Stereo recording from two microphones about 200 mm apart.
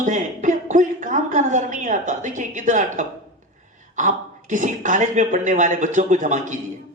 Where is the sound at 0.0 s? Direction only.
40° right (ahead or behind).